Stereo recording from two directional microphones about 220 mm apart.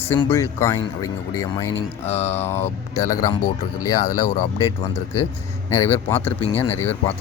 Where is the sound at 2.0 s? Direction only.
30° left (ahead or behind).